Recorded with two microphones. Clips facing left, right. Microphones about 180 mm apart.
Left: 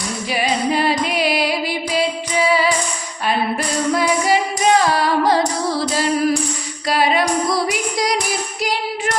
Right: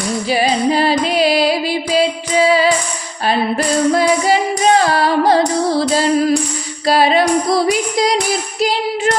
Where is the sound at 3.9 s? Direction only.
30° right (ahead or behind).